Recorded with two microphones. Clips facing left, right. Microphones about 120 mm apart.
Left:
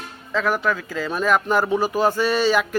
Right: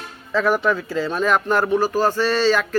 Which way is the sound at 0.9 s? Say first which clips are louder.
Right 1 dB; 5° left (ahead or behind).